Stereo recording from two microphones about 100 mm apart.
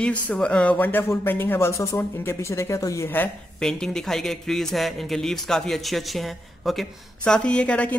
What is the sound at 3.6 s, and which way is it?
Speech, 5° left (ahead or behind).